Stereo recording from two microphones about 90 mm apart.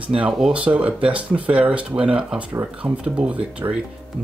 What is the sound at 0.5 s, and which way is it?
Speech, 15° right (ahead or behind).